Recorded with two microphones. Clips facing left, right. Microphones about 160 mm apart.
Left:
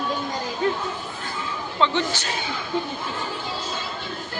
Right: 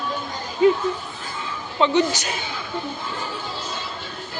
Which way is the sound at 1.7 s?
15° right (ahead or behind).